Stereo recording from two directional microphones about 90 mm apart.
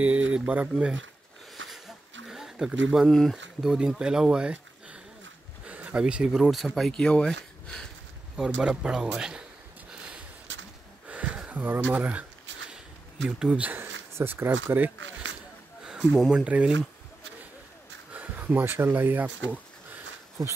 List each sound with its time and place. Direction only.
0.0 s speech: 15° right (ahead or behind)
1.5 s a sound: centre (ahead or behind)
5.7 s speech: 15° right (ahead or behind); by 7.9 s 10° left (ahead or behind)
8.4 s speech: 10° right (ahead or behind)
11.1 s a sound: 15° right (ahead or behind)
13.4 s speech: 15° right (ahead or behind)
16.3 s speech: 10° right (ahead or behind)
18.1 s speech: 20° right (ahead or behind)